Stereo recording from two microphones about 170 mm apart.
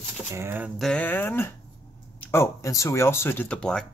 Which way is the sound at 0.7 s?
5° left (ahead or behind).